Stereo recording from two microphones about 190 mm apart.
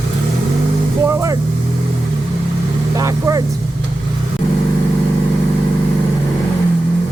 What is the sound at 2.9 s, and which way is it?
Speech, 15° right (ahead or behind).